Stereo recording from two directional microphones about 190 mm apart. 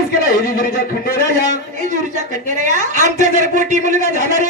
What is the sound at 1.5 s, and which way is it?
A woman's voice, 40° right (ahead or behind).